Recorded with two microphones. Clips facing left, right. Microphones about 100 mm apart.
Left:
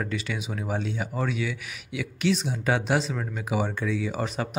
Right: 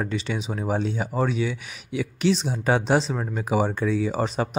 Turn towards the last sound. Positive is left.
turn(degrees=-30)  # may be behind; listen again after turning